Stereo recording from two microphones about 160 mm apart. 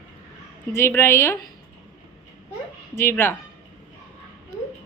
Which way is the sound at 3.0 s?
15° left (ahead or behind).